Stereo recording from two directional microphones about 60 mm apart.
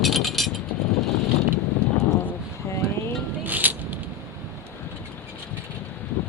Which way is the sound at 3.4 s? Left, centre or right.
Right.